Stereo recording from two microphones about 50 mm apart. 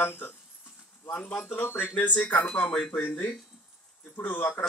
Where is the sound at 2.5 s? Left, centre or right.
Centre.